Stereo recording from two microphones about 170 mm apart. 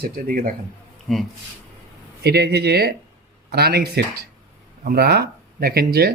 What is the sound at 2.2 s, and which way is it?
Speech, 70° right (ahead or behind).